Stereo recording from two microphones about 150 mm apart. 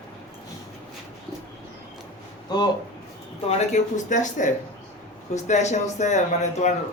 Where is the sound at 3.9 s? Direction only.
55° left (ahead or behind).